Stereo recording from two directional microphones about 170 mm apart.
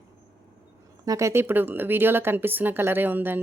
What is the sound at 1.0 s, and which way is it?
Speech, 20° right (ahead or behind).